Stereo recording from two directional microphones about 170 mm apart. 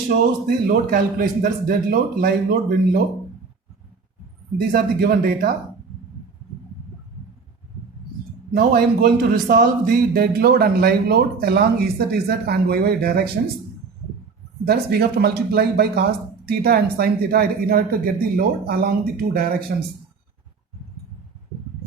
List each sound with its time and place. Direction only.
0.4 s a man's voice: 55° right (ahead or behind)
4.7 s a man's voice: 60° right (ahead or behind)
8.5 s a man's voice: 60° right (ahead or behind)
14.6 s a man's voice: 70° right (ahead or behind)